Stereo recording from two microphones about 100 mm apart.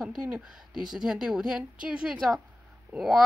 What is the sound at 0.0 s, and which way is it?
A woman's voice, 5° right (ahead or behind).